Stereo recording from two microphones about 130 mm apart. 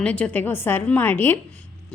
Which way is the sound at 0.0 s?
10° left (ahead or behind).